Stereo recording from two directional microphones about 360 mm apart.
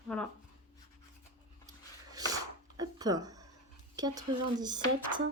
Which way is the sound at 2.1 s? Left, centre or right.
Centre.